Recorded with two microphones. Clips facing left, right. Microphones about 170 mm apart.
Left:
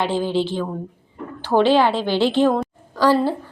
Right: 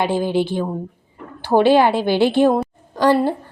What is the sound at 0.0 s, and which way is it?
A woman's voice, 15° right (ahead or behind).